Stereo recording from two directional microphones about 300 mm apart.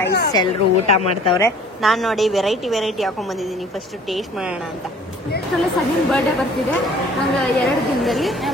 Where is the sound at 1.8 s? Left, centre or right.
Centre.